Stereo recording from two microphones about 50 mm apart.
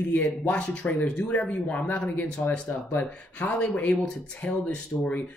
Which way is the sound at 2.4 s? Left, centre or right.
Left.